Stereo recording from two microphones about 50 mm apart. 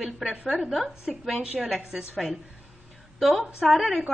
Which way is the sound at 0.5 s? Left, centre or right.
Centre.